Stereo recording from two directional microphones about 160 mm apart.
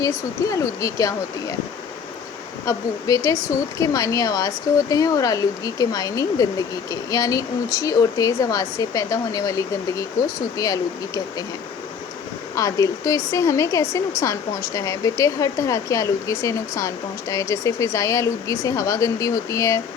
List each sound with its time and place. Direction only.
0.0 s a woman's voice: 20° left (ahead or behind)
2.6 s a woman's voice: 20° left (ahead or behind)
12.5 s a woman's voice: 20° left (ahead or behind)